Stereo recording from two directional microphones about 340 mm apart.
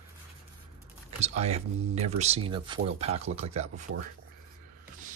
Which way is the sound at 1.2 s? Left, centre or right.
Centre.